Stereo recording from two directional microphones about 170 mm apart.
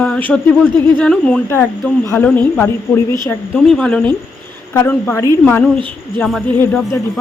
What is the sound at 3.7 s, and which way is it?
A woman's voice, 5° left (ahead or behind).